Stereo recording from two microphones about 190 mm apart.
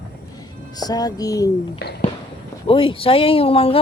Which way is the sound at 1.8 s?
55° left (ahead or behind).